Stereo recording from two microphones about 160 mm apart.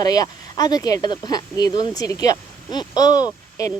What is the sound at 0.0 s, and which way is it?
A woman's voice, 25° left (ahead or behind).